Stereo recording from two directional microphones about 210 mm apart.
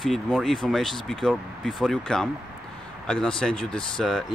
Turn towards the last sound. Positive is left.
turn(degrees=0)  # may be behind; listen again after turning